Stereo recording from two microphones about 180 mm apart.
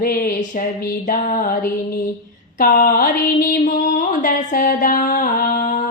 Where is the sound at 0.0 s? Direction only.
50° left (ahead or behind).